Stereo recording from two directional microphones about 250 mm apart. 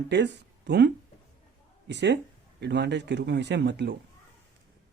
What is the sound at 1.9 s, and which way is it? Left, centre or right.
Speech, right.